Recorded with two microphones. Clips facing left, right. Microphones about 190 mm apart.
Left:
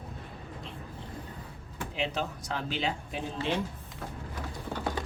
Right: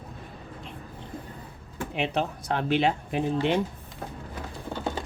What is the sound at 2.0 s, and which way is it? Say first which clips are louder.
Speech: right 5 dB; 60° right (ahead or behind).